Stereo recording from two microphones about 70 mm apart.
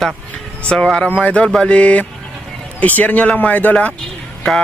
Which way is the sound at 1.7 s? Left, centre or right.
Centre.